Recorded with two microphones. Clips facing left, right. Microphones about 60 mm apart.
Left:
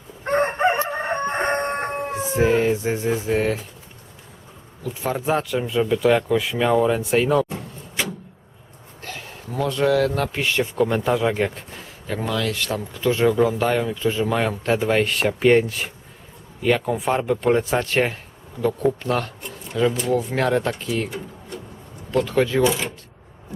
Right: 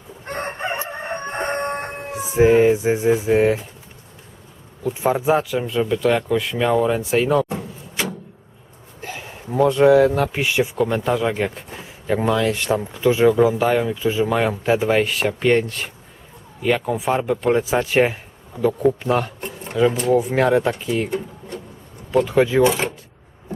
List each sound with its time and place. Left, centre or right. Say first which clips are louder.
0.3 s crowing: left 7 dB; left
2.3 s speech: right 5 dB; centre
5.0 s speech: right 4 dB; centre
7.6 s a sound: right 1 dB; centre
9.0 s speech: right 3 dB; centre
11.8 s speech: right 7 dB; centre
22.1 s speech: right 3 dB; centre
22.6 s speech: right 3 dB; right